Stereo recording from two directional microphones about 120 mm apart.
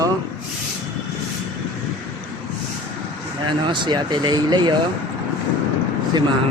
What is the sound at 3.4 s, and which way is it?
Speech, 40° right (ahead or behind).